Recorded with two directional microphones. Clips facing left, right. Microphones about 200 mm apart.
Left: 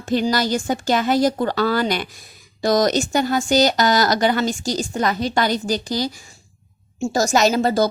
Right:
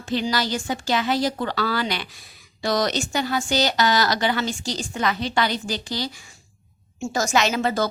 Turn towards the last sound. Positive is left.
turn(degrees=35)  # may be behind; listen again after turning